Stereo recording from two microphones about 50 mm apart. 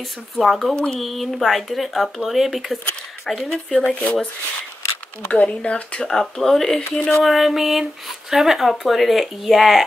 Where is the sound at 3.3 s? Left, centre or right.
Centre.